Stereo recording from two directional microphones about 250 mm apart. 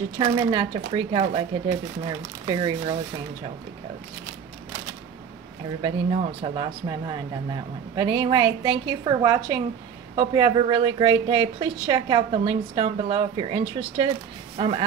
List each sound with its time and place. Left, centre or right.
0.2 s a woman's voice: centre
6.4 s a woman's voice: centre